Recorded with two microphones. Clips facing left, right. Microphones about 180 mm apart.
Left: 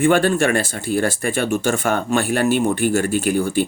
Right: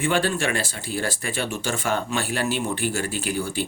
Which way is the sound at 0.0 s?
50° left (ahead or behind).